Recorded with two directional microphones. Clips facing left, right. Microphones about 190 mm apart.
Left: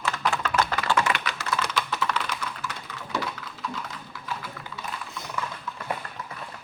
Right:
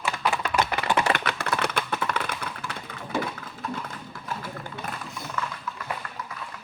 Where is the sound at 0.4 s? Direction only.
15° right (ahead or behind).